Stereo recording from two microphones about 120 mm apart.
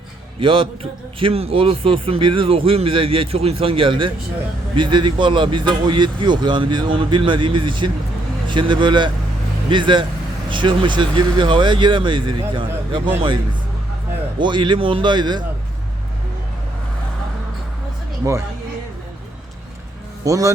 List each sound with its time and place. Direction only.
0.3 s a man's voice: 45° right (ahead or behind)
14.3 s speech: 40° right (ahead or behind)
18.3 s a man's voice: 25° right (ahead or behind)
20.2 s a man's voice: 25° right (ahead or behind)